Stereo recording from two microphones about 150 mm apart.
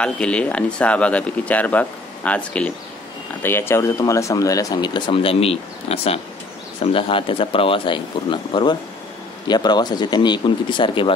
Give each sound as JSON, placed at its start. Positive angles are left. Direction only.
{"t": 0.0, "sound": "speech", "side_deg": 5}